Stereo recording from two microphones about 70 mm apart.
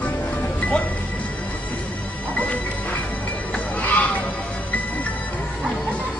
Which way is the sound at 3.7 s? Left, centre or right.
Left.